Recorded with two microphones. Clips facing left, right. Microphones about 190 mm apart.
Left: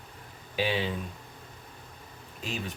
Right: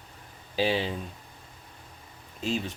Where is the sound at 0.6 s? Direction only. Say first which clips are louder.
Right 3 dB; 30° right (ahead or behind).